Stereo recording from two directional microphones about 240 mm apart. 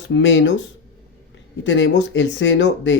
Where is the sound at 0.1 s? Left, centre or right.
Left.